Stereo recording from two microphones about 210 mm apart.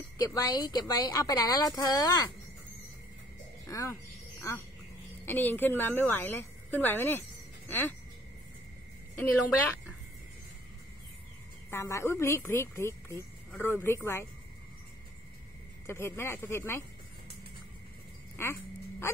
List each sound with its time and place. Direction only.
0.3 s speech: 20° left (ahead or behind)
3.6 s a sound: 15° left (ahead or behind)
5.2 s a woman's voice: 10° left (ahead or behind)
9.1 s a woman's voice: 10° left (ahead or behind)
11.7 s speech: 10° left (ahead or behind)
15.9 s speech: 10° left (ahead or behind)
18.3 s dog: 10° left (ahead or behind)